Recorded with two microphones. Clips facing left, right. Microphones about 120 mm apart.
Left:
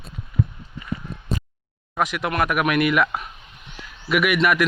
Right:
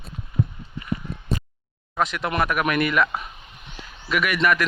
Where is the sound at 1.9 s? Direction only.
10° left (ahead or behind).